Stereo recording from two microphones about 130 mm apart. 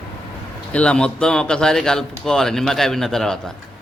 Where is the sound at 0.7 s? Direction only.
5° left (ahead or behind).